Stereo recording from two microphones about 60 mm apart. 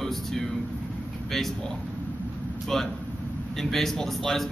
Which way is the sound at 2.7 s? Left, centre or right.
Centre.